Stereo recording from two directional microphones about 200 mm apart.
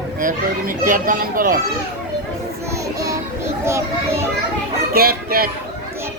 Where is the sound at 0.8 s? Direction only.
40° right (ahead or behind).